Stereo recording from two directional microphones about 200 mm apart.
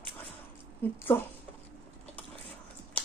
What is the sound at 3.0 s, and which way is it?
Horse, 10° left (ahead or behind).